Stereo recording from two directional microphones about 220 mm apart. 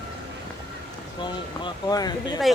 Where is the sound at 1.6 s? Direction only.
20° left (ahead or behind).